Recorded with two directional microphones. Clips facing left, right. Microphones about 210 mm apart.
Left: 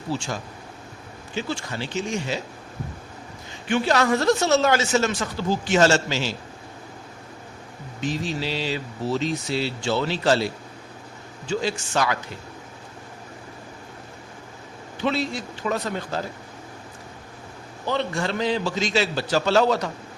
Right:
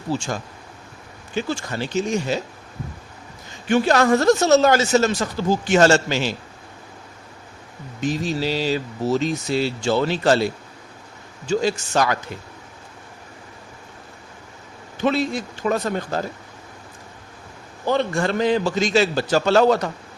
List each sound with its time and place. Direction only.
1.4 s speech: 45° right (ahead or behind)
3.7 s speech: 50° right (ahead or behind)
8.0 s speech: 45° right (ahead or behind)
11.4 s speech: 45° right (ahead or behind)
15.0 s speech: 50° right (ahead or behind)
17.8 s speech: 50° right (ahead or behind)